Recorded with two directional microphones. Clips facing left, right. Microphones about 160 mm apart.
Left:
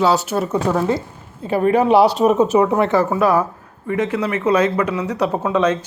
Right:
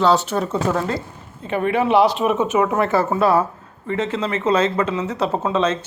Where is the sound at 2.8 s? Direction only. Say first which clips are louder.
Left 1 dB; 15° left (ahead or behind).